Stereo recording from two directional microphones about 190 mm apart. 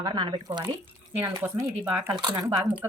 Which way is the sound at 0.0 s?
25° right (ahead or behind).